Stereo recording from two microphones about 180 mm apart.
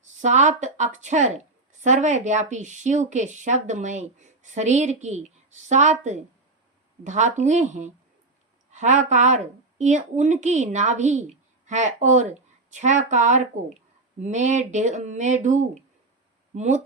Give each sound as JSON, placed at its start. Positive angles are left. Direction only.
{"t": 0.0, "sound": "speech", "side_deg": -40}